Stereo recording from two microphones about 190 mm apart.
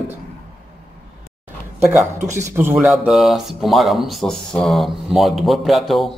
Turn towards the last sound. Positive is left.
turn(degrees=0)  # may be behind; listen again after turning